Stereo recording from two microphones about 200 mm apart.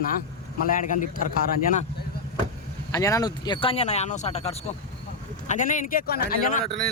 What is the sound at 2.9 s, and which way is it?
Speech, 15° left (ahead or behind).